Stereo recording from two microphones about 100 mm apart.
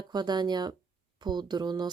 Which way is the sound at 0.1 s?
45° right (ahead or behind).